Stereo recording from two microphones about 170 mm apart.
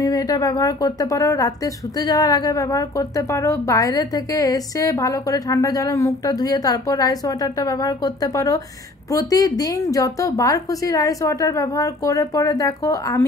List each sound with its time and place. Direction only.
0.0 s speech: 20° left (ahead or behind)